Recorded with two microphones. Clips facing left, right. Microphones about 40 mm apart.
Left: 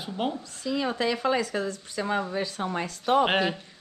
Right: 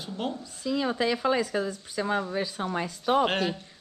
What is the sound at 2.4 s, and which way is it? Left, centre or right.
Speech, left.